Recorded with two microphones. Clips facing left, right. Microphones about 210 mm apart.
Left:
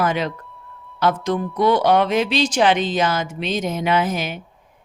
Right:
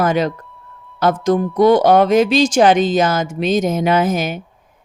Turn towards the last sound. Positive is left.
turn(degrees=-45)  # may be behind; listen again after turning